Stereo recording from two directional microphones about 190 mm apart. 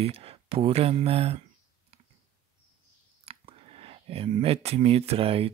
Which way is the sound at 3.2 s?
30° right (ahead or behind).